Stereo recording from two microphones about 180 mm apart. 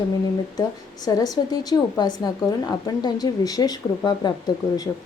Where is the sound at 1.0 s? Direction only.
20° left (ahead or behind).